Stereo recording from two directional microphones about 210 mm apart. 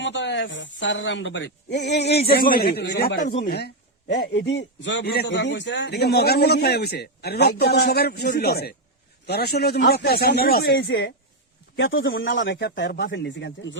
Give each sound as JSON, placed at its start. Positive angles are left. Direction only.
{"t": 0.0, "sound": "a man's voice", "side_deg": 60}